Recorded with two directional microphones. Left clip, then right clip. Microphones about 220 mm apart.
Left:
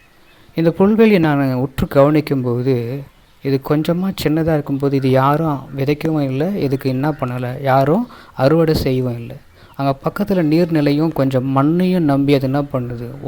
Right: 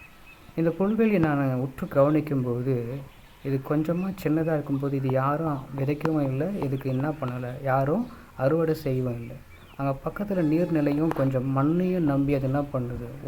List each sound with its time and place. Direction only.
0.5 s speech: 40° left (ahead or behind)